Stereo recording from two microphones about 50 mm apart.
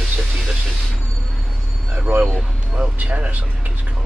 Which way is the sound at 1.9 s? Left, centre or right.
Right.